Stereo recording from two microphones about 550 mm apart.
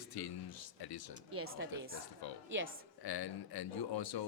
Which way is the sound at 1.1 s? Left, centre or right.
Right.